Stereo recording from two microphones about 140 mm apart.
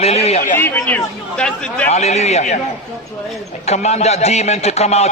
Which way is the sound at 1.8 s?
50° left (ahead or behind).